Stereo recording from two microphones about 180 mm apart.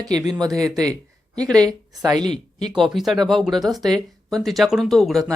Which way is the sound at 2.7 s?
Centre (ahead or behind).